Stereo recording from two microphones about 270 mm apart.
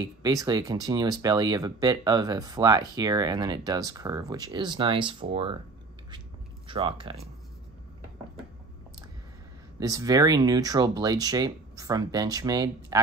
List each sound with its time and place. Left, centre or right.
0.0 s speech: centre
6.7 s speech: centre
9.8 s speech: centre